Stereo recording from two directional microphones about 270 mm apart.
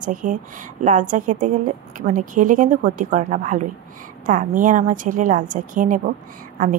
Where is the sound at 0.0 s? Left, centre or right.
Right.